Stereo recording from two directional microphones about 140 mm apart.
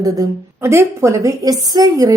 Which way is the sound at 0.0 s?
20° right (ahead or behind).